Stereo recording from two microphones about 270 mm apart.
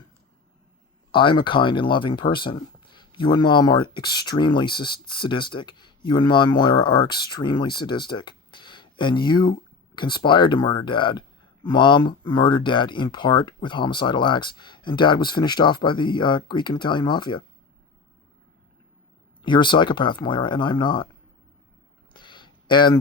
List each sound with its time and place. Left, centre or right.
1.1 s speech: centre
19.4 s speech: centre
22.1 s a sound: centre